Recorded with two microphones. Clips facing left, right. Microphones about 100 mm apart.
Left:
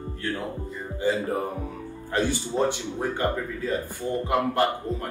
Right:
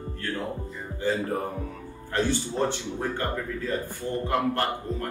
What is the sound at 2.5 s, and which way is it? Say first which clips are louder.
Speech: left 2 dB; 15° left (ahead or behind).